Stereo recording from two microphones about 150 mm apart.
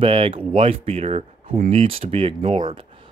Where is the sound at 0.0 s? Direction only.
35° right (ahead or behind).